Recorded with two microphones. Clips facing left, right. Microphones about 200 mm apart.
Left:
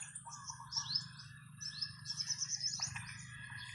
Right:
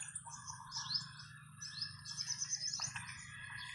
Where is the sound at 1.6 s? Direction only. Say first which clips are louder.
Left 2 dB; 15° right (ahead or behind).